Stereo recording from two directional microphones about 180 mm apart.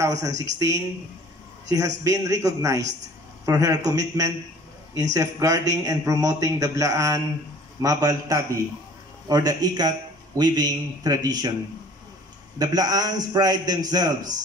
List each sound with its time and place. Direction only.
0.0 s speech: 15° right (ahead or behind)
2.0 s a man's voice: 20° right (ahead or behind)
12.5 s a man's voice: 20° right (ahead or behind)